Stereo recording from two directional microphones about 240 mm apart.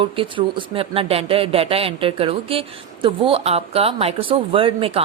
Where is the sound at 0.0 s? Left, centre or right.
Right.